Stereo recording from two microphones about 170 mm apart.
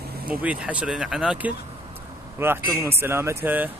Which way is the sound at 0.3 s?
10° right (ahead or behind).